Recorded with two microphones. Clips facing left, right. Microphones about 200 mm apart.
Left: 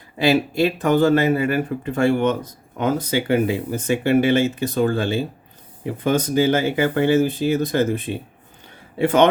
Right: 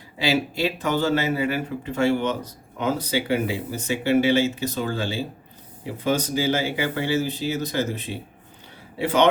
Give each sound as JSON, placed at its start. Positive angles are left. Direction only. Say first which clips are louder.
{"t": 0.2, "sound": "speech", "louder": "left 5 dB", "side_deg": 50}